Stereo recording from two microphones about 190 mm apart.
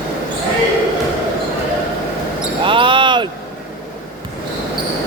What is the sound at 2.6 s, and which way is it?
Basketball bounce, 25° right (ahead or behind).